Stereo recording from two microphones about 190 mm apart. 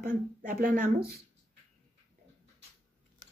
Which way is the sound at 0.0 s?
50° right (ahead or behind).